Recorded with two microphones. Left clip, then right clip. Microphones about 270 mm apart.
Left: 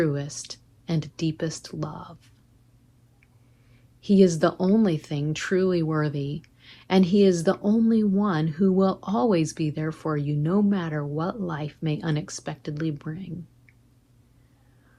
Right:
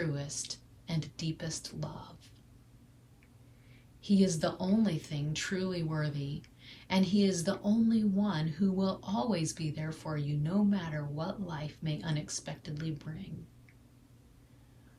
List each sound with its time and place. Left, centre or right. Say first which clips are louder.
0.0 s speech: left 11 dB; centre
4.0 s speech: left 11 dB; centre